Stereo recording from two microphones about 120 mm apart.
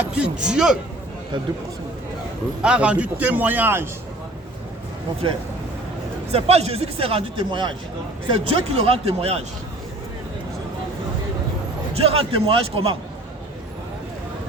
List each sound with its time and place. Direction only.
0.0 s a man's voice: 10° right (ahead or behind)
2.6 s a man's voice: 10° right (ahead or behind)
6.3 s speech: 60° right (ahead or behind)
11.9 s speech: 55° right (ahead or behind)